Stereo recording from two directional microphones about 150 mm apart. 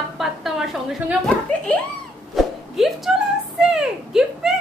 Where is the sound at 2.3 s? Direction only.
Centre (ahead or behind).